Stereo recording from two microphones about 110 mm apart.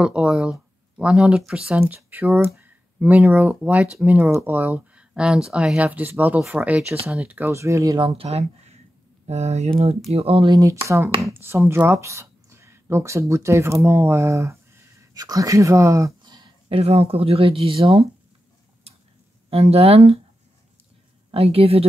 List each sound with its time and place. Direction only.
0.0 s speech: 10° right (ahead or behind)
1.8 s speech: 20° right (ahead or behind)
8.0 s speech: 60° right (ahead or behind); by 8.7 s 80° right
9.3 s speech: 90° right; by 9.9 s 70° right (ahead or behind)
10.1 s speech: 60° right (ahead or behind)
10.5 s speech: 30° right (ahead or behind)
16.2 s a sound: 40° right (ahead or behind)
16.6 s speech: 65° right (ahead or behind)
19.5 s speech: 65° right (ahead or behind)
21.3 s speech: 60° right (ahead or behind)